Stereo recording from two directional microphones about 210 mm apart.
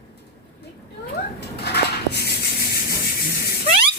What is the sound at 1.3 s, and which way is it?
Dishes, 50° left (ahead or behind).